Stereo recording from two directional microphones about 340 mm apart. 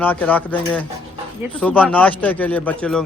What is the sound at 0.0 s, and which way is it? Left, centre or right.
Speech, centre.